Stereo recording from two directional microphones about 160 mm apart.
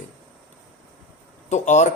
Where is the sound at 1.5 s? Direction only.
45° left (ahead or behind).